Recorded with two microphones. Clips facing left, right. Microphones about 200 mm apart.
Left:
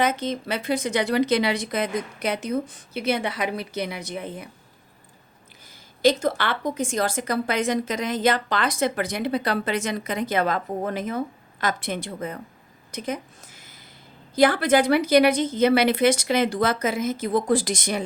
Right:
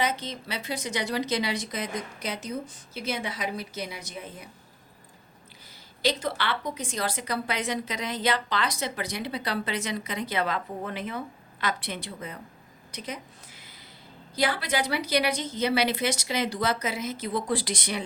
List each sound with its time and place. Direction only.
0.0 s a woman's voice: 50° left (ahead or behind)
6.0 s a woman's voice: 45° left (ahead or behind)
14.3 s a woman's voice: 50° left (ahead or behind)